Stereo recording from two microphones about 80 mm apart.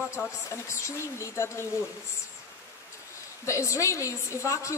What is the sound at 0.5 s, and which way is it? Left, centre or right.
A woman's voice, left.